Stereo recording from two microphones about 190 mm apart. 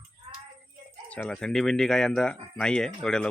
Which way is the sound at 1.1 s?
5° left (ahead or behind).